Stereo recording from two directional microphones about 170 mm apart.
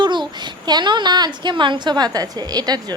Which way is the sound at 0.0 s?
25° right (ahead or behind).